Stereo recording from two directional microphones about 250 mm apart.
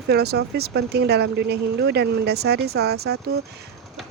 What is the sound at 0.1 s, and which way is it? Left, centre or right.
A woman's voice, right.